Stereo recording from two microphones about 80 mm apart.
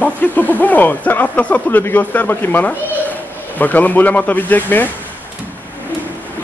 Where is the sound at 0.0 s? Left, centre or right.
Left.